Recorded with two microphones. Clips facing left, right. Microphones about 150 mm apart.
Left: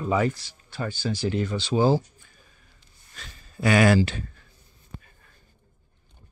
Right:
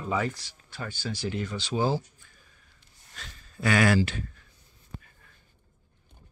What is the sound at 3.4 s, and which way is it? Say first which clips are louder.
Speech: left 4 dB; 15° left (ahead or behind).